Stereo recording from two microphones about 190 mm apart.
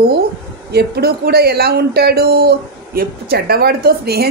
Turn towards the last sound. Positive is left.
turn(degrees=-55)  # may be behind; listen again after turning